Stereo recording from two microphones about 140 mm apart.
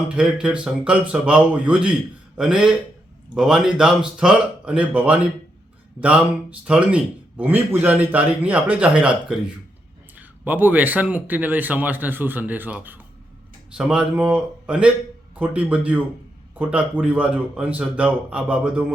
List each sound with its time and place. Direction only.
0.2 s a man's voice: 5° right (ahead or behind)